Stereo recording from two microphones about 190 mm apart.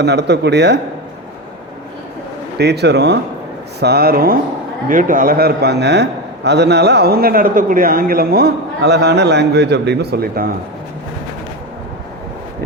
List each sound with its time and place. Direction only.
0.0 s a man's voice: 60° right (ahead or behind)
2.6 s a man's voice: 60° right (ahead or behind)